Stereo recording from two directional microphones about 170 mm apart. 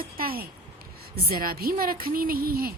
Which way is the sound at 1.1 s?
60° right (ahead or behind).